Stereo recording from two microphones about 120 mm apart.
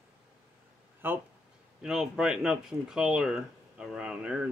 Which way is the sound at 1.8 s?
5° right (ahead or behind).